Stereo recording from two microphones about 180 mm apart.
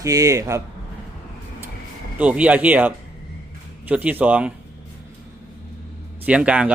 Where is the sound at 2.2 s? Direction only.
10° right (ahead or behind).